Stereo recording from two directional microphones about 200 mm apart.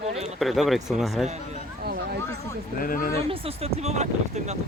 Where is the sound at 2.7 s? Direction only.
45° left (ahead or behind).